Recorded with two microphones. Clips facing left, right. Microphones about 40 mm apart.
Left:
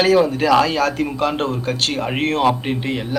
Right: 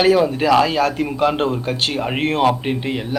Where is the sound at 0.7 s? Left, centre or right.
Right.